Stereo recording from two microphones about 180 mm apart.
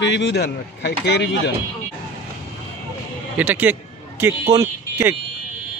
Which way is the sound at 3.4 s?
10° right (ahead or behind).